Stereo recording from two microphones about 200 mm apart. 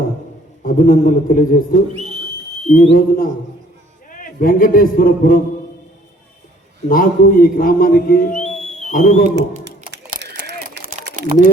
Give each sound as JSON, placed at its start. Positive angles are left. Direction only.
{"t": 0.6, "sound": "a man's voice", "side_deg": 45}
{"t": 6.8, "sound": "a man's voice", "side_deg": 45}
{"t": 10.2, "sound": "a sound", "side_deg": -55}
{"t": 11.3, "sound": "speech", "side_deg": -35}